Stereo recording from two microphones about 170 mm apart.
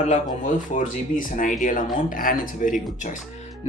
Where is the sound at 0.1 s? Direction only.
45° left (ahead or behind).